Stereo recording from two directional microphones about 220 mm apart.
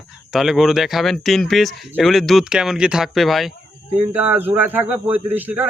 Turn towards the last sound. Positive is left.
turn(degrees=-10)  # may be behind; listen again after turning